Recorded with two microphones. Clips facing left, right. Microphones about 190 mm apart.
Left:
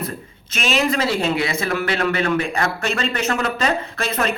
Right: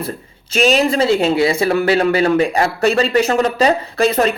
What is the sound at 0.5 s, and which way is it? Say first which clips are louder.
Speech: right 6 dB; 35° right (ahead or behind).